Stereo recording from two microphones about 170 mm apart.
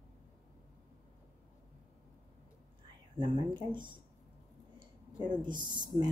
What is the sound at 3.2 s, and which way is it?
Speech, 30° right (ahead or behind).